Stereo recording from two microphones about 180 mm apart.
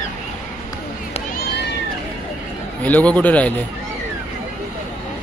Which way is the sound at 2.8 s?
10° left (ahead or behind).